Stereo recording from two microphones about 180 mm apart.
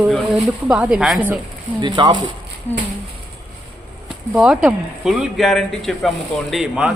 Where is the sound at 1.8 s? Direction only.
25° right (ahead or behind).